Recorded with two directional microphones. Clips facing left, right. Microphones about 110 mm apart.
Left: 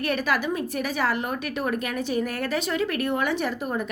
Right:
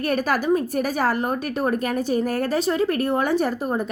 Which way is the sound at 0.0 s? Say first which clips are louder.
Right 3 dB; 40° right (ahead or behind).